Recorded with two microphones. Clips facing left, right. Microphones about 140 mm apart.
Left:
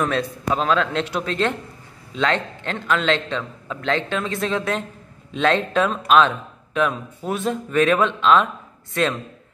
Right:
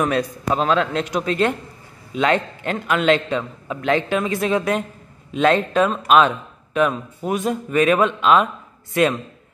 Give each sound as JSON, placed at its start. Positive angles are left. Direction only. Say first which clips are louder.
{"t": 0.0, "sound": "a man's voice", "louder": "right 2 dB", "side_deg": -5}